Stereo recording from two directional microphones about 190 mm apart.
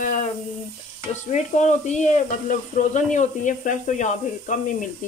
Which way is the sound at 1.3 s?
40° left (ahead or behind).